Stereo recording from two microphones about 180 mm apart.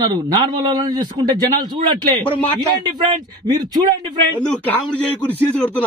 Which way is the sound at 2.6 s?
20° right (ahead or behind).